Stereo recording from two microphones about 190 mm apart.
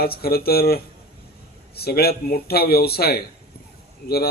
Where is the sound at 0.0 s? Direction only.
55° left (ahead or behind).